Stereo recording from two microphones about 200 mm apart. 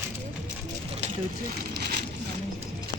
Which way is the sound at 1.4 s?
50° right (ahead or behind).